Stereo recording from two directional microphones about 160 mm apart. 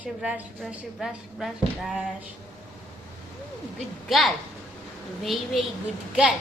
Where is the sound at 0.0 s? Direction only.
10° right (ahead or behind).